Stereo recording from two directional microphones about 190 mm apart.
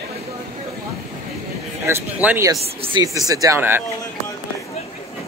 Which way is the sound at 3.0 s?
20° right (ahead or behind).